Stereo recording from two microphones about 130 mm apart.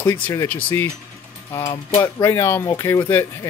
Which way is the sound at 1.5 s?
25° left (ahead or behind).